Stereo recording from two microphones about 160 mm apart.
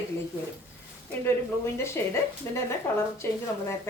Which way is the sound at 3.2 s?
15° left (ahead or behind).